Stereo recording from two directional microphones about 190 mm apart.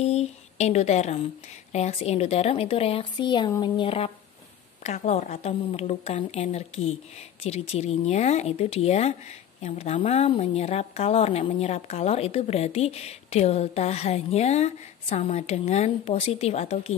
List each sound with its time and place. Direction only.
0.0 s a woman's voice: 35° left (ahead or behind)